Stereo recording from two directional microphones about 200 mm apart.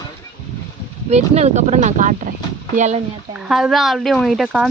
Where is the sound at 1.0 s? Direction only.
35° right (ahead or behind).